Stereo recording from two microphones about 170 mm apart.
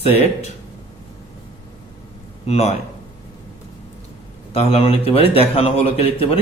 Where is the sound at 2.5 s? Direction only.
40° left (ahead or behind).